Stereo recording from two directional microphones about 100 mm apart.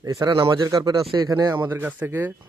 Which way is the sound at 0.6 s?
40° right (ahead or behind).